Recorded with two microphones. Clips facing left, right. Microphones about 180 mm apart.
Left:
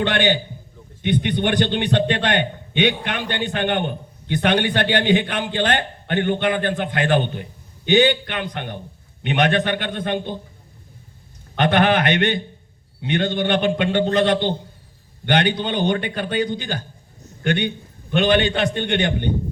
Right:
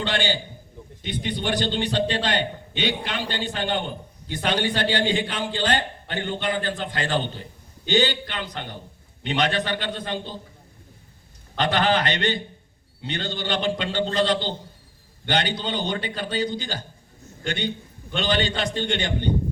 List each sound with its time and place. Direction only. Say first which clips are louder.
0.0 s a man's voice: left 6 dB; 60° left (ahead or behind)
11.5 s a man's voice: left 5 dB; 60° left (ahead or behind)